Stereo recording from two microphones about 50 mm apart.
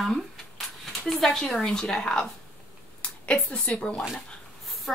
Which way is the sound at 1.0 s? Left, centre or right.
Centre.